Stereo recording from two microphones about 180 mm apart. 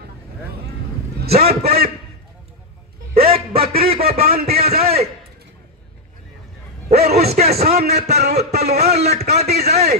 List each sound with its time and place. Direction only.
1.3 s a man's voice: 35° right (ahead or behind)
3.3 s a sound: 35° right (ahead or behind)
4.1 s a man's voice: 35° right (ahead or behind)
7.2 s a man's voice: 35° right (ahead or behind)